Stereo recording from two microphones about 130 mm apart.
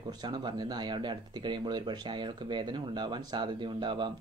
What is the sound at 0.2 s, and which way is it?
Speech, 35° right (ahead or behind).